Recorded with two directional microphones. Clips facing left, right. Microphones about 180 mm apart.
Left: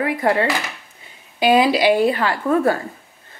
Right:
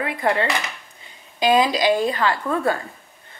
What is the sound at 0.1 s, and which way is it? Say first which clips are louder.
Speech: left 1 dB; 25° left (ahead or behind).